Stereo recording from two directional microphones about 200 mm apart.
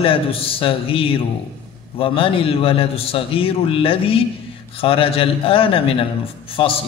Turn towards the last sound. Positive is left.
turn(degrees=25)  # may be behind; listen again after turning